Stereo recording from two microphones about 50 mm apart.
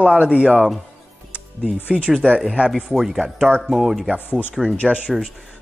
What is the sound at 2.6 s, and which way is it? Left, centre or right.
Speech, centre.